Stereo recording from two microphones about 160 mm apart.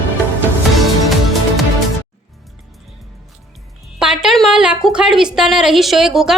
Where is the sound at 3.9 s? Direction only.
5° right (ahead or behind).